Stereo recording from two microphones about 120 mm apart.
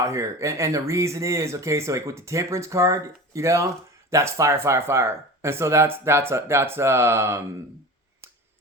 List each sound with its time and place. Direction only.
0.0 s speech: 25° right (ahead or behind)